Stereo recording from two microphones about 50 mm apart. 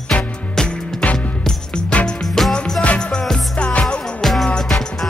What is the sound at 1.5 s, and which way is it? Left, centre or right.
Music, centre.